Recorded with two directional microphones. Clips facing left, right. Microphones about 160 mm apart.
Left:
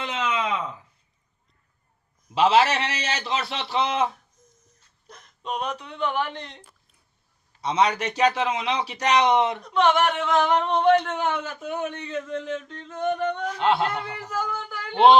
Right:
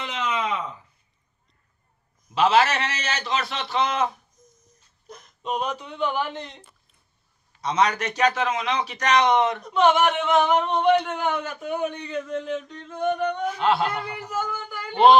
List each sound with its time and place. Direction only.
2.3 s a man's voice: 30° left (ahead or behind)
5.1 s speech: centre (ahead or behind)
7.8 s a man's voice: 30° left (ahead or behind)
9.6 s speech: 5° right (ahead or behind)
10.3 s singing: 10° right (ahead or behind)
10.6 s speech: 5° right (ahead or behind)